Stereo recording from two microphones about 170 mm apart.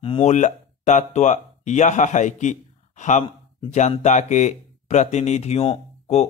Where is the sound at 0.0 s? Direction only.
35° left (ahead or behind).